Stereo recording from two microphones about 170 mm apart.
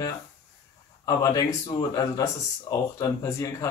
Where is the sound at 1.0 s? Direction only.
20° left (ahead or behind).